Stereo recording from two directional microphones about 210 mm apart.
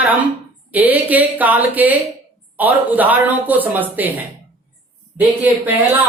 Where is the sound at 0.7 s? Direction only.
10° right (ahead or behind).